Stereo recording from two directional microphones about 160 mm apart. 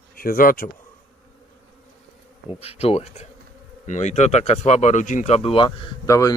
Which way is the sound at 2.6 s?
40° left (ahead or behind).